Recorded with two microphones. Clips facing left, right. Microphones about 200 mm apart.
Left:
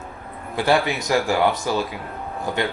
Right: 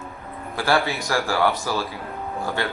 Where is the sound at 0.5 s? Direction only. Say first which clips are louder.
Left 2 dB; 20° left (ahead or behind).